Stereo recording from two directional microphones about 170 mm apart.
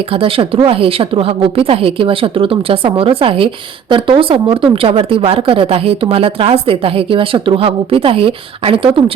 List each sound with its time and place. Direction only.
0.1 s a woman's voice: 30° right (ahead or behind)